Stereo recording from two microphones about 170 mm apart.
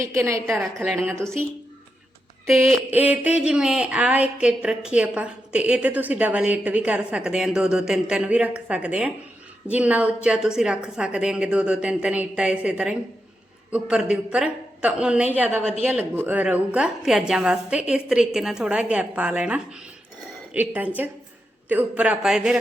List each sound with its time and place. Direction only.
0.0 s speech: 15° right (ahead or behind)
2.6 s a woman's voice: 10° right (ahead or behind)